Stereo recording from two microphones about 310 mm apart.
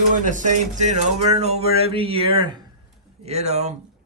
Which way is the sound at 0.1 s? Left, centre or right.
Right.